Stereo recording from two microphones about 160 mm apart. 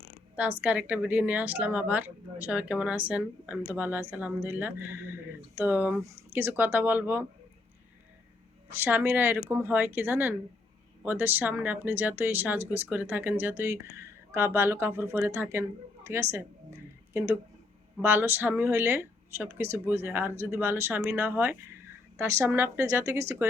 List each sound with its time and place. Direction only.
0.6 s speech: 10° right (ahead or behind)
8.7 s speech: 10° right (ahead or behind)
18.0 s speech: 10° right (ahead or behind)